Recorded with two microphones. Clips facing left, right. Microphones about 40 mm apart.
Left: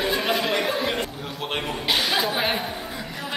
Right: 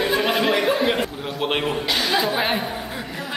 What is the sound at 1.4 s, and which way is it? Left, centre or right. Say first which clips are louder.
Speech: right 6 dB; right.